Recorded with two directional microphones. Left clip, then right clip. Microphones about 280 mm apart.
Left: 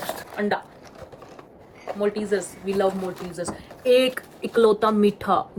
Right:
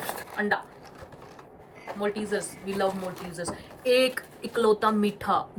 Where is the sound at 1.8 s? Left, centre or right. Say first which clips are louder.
Left 5 dB; centre.